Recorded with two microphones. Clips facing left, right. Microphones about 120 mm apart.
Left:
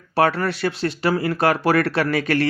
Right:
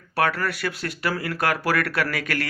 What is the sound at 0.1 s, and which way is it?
Speech, 25° left (ahead or behind).